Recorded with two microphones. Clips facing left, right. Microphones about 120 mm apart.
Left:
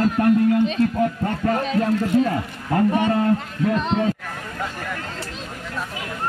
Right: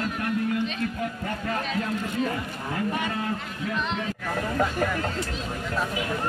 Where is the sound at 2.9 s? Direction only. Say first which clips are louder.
Left 9 dB; 30° left (ahead or behind).